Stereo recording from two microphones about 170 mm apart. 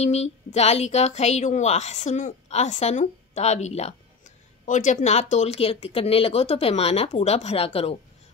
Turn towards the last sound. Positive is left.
turn(degrees=35)  # may be behind; listen again after turning